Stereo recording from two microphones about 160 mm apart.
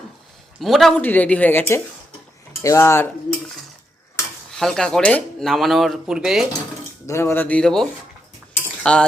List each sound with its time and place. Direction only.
0.6 s a woman's voice: centre (ahead or behind); by 3.1 s 15° left (ahead or behind)
4.5 s speech: 5° left (ahead or behind)
7.1 s a woman's voice: 15° left (ahead or behind)
8.8 s cutlery: 5° left (ahead or behind)